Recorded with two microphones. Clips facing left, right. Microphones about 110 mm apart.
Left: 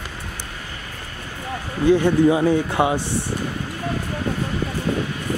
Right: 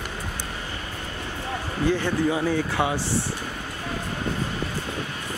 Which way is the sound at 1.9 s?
20° left (ahead or behind).